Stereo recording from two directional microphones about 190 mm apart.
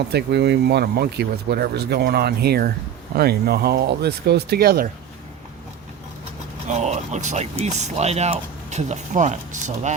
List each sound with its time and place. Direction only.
0.1 s speech: 60° right (ahead or behind)
6.7 s speech: 35° right (ahead or behind)